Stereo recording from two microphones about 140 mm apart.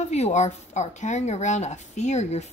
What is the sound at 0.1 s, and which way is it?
Speech, 55° left (ahead or behind).